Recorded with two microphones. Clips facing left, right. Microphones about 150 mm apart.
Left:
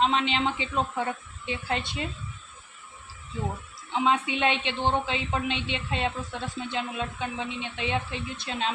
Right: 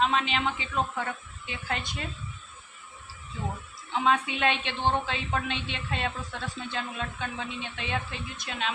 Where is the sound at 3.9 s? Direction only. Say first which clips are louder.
Left 1 dB; 20° left (ahead or behind).